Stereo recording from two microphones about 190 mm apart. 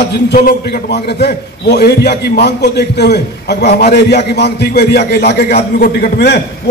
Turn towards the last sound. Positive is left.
turn(degrees=60)  # may be behind; listen again after turning